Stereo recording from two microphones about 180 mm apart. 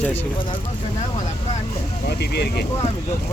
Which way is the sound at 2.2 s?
65° left (ahead or behind).